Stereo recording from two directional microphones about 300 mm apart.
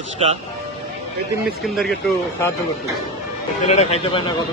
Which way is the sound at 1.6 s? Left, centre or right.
Centre.